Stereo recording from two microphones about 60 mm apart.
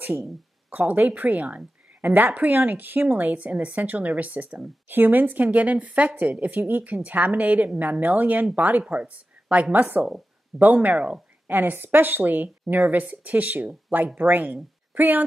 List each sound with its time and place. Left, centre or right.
0.7 s a woman's voice: right